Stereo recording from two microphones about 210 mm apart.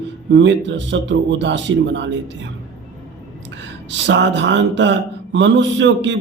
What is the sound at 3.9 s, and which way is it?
A man's voice, 60° right (ahead or behind).